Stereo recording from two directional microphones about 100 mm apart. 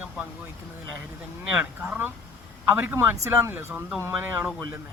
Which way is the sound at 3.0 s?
30° right (ahead or behind).